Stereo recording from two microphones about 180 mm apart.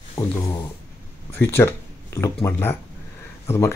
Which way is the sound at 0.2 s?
15° left (ahead or behind).